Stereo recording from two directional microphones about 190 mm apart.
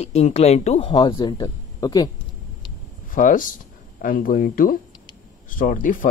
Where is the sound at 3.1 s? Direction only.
45° left (ahead or behind).